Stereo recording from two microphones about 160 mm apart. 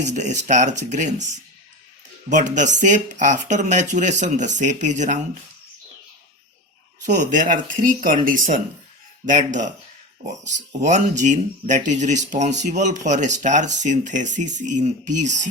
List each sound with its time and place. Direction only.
0.0 s speech: 50° right (ahead or behind)
7.0 s speech: 55° right (ahead or behind)